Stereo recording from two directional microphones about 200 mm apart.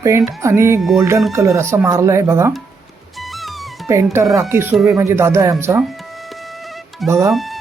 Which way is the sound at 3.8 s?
15° right (ahead or behind).